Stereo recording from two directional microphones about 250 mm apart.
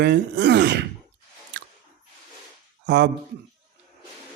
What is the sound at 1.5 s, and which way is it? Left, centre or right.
Chewing, right.